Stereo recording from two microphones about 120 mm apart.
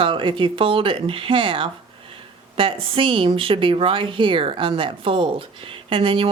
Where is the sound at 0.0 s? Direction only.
45° right (ahead or behind).